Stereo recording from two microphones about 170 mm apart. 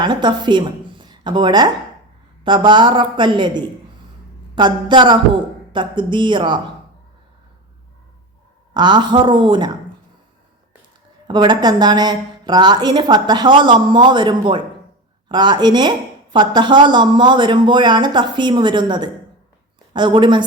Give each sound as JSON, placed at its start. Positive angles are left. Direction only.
{"t": 0.0, "sound": "a woman's voice", "side_deg": -25}
{"t": 8.7, "sound": "speech", "side_deg": -25}
{"t": 11.3, "sound": "speech", "side_deg": -25}